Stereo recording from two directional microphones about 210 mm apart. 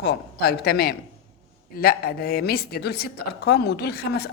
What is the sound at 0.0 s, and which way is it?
A woman's voice, 50° left (ahead or behind).